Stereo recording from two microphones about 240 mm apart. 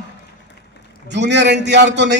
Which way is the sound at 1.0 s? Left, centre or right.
Right.